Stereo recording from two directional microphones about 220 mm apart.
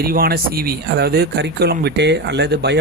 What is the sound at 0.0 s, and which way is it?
Speech, 40° right (ahead or behind).